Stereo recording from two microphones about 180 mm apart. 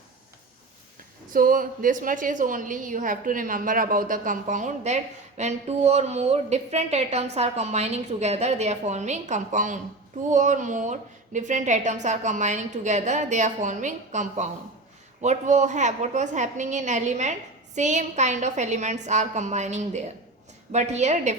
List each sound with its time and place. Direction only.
1.3 s a woman's voice: 50° right (ahead or behind)